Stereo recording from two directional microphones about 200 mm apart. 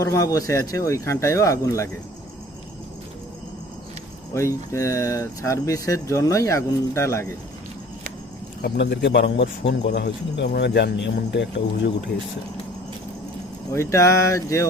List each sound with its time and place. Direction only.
0.0 s speech: 15° left (ahead or behind)
4.4 s speech: 15° left (ahead or behind)
8.6 s a man's voice: 55° left (ahead or behind)
13.7 s speech: 15° left (ahead or behind)